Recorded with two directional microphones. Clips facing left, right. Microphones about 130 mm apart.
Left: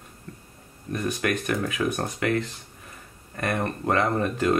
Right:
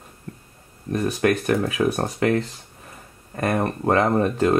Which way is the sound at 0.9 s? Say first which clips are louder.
Right 6 dB; 35° right (ahead or behind).